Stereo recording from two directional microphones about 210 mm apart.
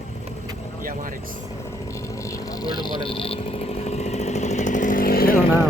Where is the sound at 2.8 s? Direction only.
25° left (ahead or behind); by 5.4 s 45° left (ahead or behind).